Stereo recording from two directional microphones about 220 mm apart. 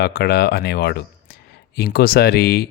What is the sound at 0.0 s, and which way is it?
Speech, 45° left (ahead or behind).